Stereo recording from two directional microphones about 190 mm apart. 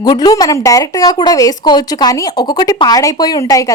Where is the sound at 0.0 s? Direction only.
20° left (ahead or behind).